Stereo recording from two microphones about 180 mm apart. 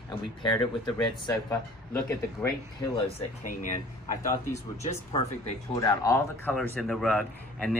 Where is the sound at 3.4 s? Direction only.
45° left (ahead or behind).